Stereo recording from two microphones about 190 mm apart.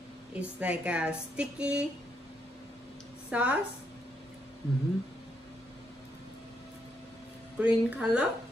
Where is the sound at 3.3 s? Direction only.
5° right (ahead or behind).